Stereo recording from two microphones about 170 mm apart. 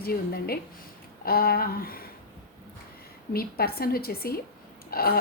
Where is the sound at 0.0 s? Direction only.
65° left (ahead or behind).